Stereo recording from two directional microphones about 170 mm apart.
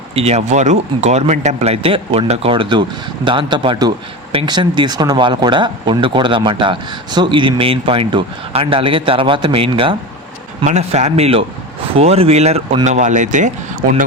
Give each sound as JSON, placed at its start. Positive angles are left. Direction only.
{"t": 0.1, "sound": "speech", "side_deg": -35}
{"t": 10.7, "sound": "speech", "side_deg": -40}